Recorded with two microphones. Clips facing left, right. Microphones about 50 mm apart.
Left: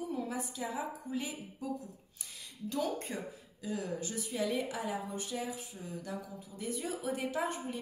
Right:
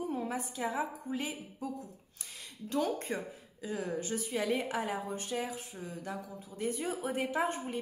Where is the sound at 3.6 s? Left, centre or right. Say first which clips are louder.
Right 2 dB; right.